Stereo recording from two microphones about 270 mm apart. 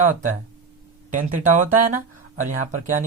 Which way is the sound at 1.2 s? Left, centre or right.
Right.